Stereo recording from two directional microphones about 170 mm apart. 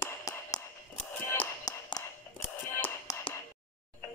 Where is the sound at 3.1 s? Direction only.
20° left (ahead or behind).